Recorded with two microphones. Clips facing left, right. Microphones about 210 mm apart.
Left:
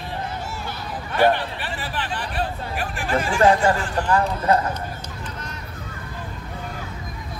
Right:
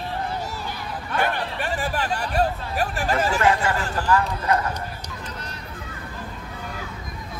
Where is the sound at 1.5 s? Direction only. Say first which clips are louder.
Right 4 dB; 45° right (ahead or behind).